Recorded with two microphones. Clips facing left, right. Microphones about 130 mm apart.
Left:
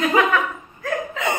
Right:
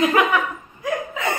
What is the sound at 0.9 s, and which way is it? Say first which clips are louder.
Hiccup: right 1 dB; 15° right (ahead or behind).